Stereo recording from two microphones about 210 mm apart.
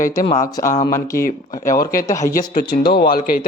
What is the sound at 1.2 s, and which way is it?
Speech, 40° left (ahead or behind).